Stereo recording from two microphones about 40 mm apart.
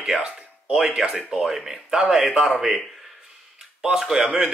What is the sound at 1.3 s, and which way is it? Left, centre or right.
Speech, centre.